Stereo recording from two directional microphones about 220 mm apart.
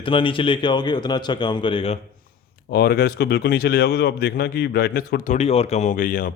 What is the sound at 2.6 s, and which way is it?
A man's voice, 45° left (ahead or behind).